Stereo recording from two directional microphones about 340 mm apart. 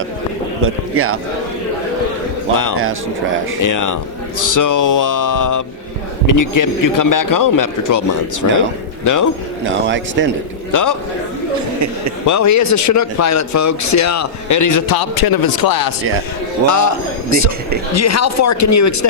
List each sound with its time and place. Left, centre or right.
0.6 s speech: right
3.6 s speech: left
9.6 s speech: right
10.7 s a man's voice: left
12.2 s speech: left
16.6 s speech: left